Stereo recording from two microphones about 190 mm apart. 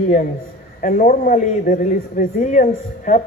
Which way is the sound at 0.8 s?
40° left (ahead or behind).